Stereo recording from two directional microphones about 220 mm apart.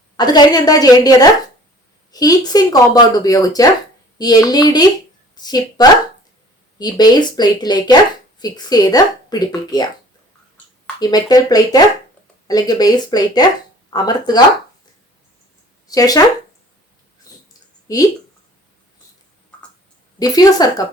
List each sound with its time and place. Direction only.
0.2 s a woman's voice: 20° left (ahead or behind)
11.0 s speech: 15° left (ahead or behind)
15.9 s speech: 15° left (ahead or behind)
17.8 s speech: 15° left (ahead or behind)
20.1 s speech: 15° left (ahead or behind)